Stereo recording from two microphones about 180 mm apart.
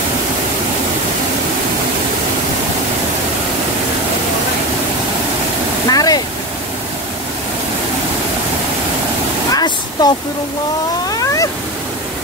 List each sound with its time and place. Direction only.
5.9 s waterfall: 20° left (ahead or behind)
9.5 s a sound: 20° left (ahead or behind)
11.1 s cat: 20° left (ahead or behind)